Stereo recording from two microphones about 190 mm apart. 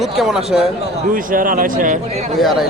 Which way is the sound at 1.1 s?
45° right (ahead or behind).